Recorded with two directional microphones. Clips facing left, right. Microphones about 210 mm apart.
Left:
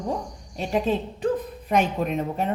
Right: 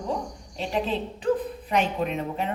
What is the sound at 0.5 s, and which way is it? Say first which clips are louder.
A woman's voice: left 3 dB; 45° left (ahead or behind).